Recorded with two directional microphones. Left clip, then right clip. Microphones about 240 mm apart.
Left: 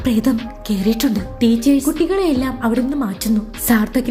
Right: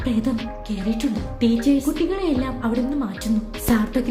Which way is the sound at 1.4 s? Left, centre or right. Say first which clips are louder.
Left 4 dB; left.